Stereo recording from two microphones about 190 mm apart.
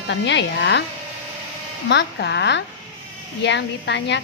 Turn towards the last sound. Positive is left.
turn(degrees=70)  # may be behind; listen again after turning